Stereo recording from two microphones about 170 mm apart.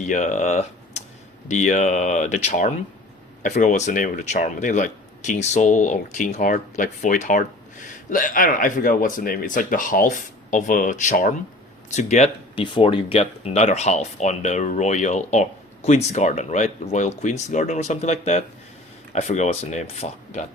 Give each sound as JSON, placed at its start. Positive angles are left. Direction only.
{"t": 0.0, "sound": "speech", "side_deg": 45}
{"t": 12.6, "sound": "speech", "side_deg": 30}